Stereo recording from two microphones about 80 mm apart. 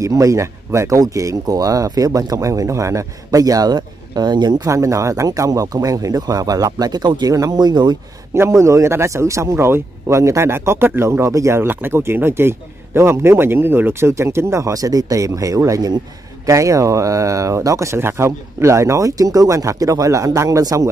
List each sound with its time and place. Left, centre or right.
0.0 s speech: right
4.6 s speech: right
8.4 s speech: right
11.6 s speech: right